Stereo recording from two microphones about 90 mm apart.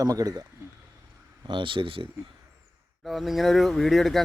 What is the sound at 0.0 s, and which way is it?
Speech, 40° right (ahead or behind).